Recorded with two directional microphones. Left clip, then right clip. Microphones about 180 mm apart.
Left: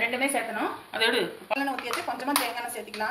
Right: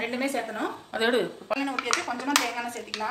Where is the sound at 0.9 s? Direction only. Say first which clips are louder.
Right 1 dB; 45° right (ahead or behind).